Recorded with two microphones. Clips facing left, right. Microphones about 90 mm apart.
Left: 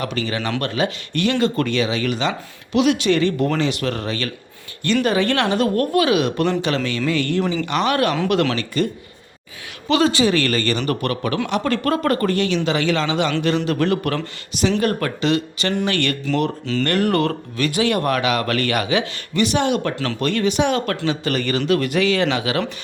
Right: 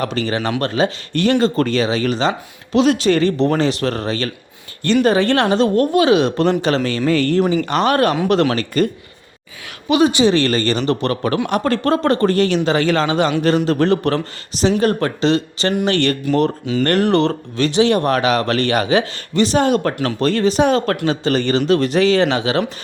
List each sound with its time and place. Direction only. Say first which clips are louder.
0.0 s speech: right 4 dB; 35° right (ahead or behind)
9.9 s speech: right 3 dB; 20° right (ahead or behind); by 19.9 s 40° right (ahead or behind)
20.0 s speech: right 4 dB; 30° right (ahead or behind)